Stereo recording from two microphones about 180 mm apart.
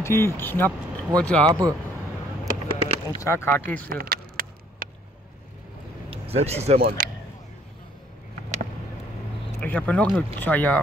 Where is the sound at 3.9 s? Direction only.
55° right (ahead or behind).